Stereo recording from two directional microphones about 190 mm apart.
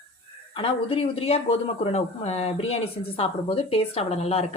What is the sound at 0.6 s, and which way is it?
Speech, 30° left (ahead or behind).